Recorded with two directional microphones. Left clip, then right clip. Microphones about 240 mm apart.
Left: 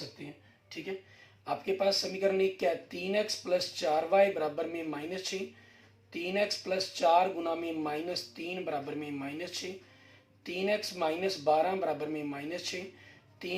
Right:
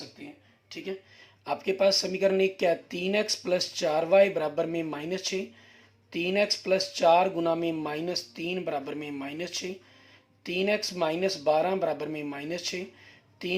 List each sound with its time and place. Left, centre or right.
1.5 s speech: right